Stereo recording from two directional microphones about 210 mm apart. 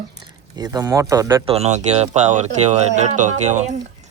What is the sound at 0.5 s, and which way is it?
Speech, 20° right (ahead or behind).